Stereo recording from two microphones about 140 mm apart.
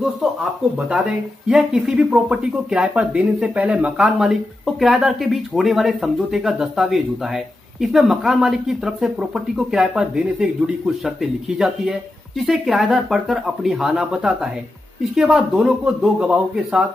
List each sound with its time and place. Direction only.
0.0 s speech: 5° right (ahead or behind)